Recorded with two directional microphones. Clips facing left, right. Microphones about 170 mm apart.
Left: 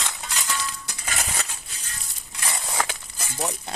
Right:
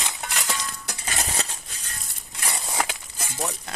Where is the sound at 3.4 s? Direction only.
40° left (ahead or behind).